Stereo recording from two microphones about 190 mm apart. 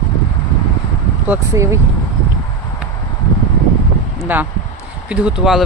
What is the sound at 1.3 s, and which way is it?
Speech, 15° right (ahead or behind).